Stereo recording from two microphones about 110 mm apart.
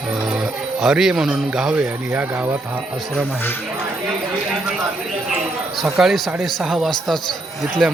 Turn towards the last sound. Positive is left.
turn(degrees=-5)  # may be behind; listen again after turning